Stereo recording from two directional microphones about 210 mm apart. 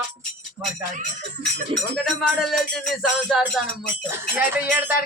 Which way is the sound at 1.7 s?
25° right (ahead or behind).